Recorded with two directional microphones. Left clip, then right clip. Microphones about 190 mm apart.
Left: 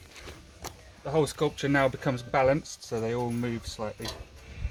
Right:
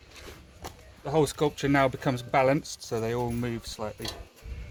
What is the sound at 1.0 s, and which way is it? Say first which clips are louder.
Speech: right 1 dB; 35° right (ahead or behind).